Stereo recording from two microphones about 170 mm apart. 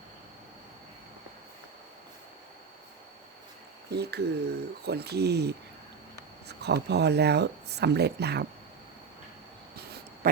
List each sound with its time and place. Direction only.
3.8 s speech: 75° right (ahead or behind)